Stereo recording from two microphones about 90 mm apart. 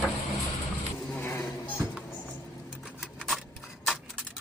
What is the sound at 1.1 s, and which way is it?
Music, 25° left (ahead or behind).